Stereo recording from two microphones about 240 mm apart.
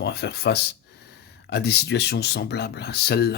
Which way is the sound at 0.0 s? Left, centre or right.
Left.